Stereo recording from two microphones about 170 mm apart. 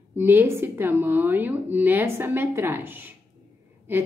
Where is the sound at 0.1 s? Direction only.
10° right (ahead or behind).